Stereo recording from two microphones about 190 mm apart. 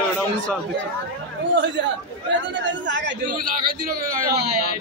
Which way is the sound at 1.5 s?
70° right (ahead or behind).